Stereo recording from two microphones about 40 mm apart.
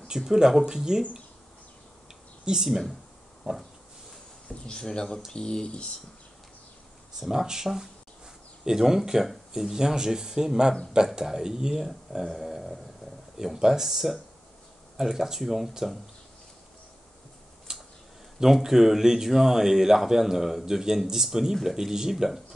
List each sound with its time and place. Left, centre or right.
0.1 s speech: centre
2.4 s speech: centre
4.5 s speech: left
7.2 s speech: centre
17.7 s a sound: centre
18.4 s speech: centre